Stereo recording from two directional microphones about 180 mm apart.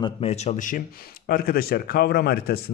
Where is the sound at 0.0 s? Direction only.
35° left (ahead or behind).